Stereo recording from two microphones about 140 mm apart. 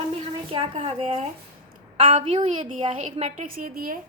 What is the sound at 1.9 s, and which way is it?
A woman's voice, 35° right (ahead or behind).